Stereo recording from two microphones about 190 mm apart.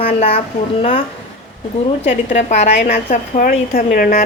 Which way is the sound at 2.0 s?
35° left (ahead or behind).